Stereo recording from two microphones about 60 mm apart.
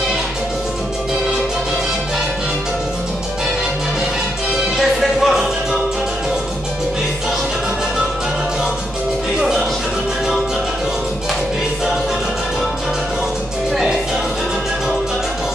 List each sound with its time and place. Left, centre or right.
4.7 s music: centre
9.4 s music: centre